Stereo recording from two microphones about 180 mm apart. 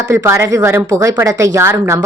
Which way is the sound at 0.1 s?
15° right (ahead or behind).